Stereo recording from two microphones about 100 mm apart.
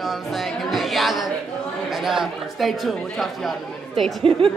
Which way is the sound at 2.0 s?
Centre (ahead or behind).